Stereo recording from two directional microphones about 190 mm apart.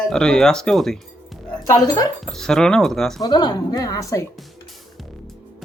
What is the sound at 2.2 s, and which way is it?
Speech, 5° left (ahead or behind).